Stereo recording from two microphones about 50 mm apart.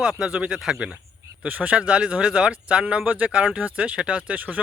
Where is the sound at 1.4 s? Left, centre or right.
Right.